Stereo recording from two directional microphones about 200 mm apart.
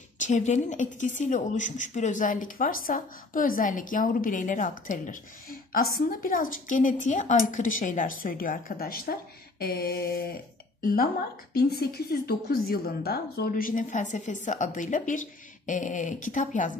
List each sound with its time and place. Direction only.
0.2 s a woman's voice: 35° left (ahead or behind)